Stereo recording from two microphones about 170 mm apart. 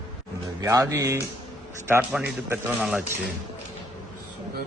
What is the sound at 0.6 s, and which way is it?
Speech, 20° right (ahead or behind).